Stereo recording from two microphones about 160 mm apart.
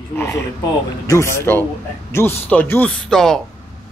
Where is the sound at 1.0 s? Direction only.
20° left (ahead or behind).